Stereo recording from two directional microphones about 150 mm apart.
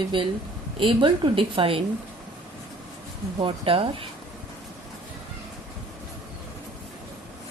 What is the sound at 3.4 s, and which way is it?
Speech, 40° right (ahead or behind).